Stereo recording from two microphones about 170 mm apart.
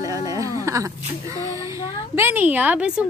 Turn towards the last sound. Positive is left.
turn(degrees=-5)  # may be behind; listen again after turning